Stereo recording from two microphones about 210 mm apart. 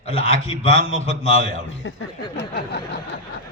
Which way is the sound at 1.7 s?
65° left (ahead or behind).